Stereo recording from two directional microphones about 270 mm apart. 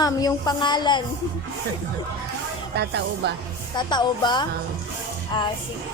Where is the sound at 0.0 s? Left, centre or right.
Centre.